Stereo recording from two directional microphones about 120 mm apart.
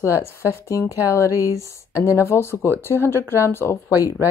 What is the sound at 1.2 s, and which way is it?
Speech, 25° left (ahead or behind).